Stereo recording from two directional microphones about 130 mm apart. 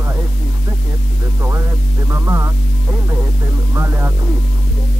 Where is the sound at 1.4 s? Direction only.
20° right (ahead or behind).